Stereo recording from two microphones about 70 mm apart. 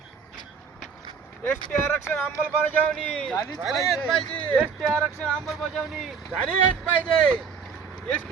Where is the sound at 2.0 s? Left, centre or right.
Left.